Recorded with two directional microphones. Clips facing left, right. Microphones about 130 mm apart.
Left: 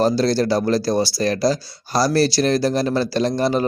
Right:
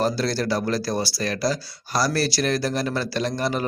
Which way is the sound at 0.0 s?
30° left (ahead or behind).